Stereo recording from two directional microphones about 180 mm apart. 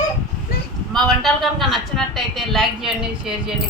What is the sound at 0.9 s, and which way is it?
A woman's voice, centre (ahead or behind).